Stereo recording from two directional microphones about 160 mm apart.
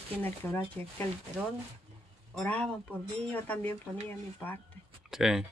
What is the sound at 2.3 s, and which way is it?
Speech, 10° left (ahead or behind).